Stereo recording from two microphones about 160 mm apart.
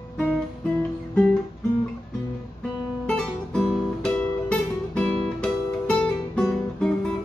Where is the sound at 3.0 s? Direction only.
5° left (ahead or behind).